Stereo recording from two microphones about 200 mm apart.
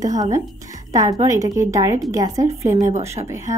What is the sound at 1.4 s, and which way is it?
Speech, 15° right (ahead or behind).